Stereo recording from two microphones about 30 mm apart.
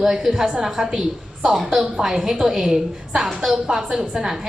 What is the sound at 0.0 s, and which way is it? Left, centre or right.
A woman's voice, centre.